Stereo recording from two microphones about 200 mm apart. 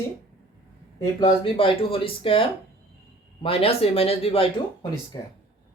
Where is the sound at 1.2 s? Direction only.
25° left (ahead or behind).